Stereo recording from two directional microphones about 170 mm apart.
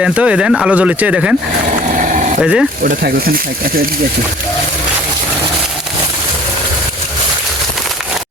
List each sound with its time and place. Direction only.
0.0 s speech: 5° right (ahead or behind)
2.0 s a sound: 45° right (ahead or behind)
2.4 s speech: 5° right (ahead or behind)
2.8 s speech: 55° right (ahead or behind)